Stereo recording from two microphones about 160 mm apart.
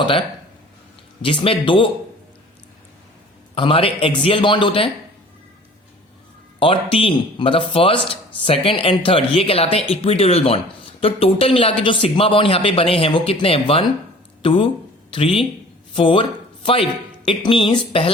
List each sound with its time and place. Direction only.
1.2 s speech: 30° left (ahead or behind)
3.5 s speech: 35° left (ahead or behind)
6.6 s speech: 35° left (ahead or behind)